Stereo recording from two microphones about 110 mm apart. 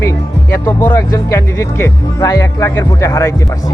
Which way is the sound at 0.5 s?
20° left (ahead or behind).